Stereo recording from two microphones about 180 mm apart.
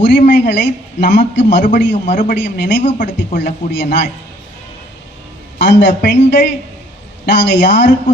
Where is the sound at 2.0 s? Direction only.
45° left (ahead or behind).